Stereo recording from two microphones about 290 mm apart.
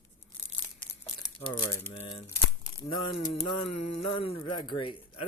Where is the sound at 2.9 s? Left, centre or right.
Left.